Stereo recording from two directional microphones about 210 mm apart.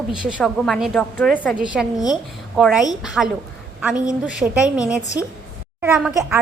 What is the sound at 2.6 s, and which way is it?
A woman's voice, 5° right (ahead or behind).